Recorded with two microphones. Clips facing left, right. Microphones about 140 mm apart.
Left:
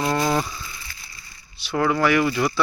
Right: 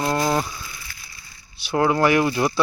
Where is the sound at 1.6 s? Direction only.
15° right (ahead or behind).